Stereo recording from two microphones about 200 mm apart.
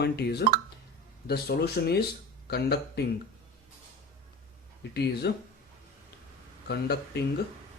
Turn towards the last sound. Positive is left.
turn(degrees=55)  # may be behind; listen again after turning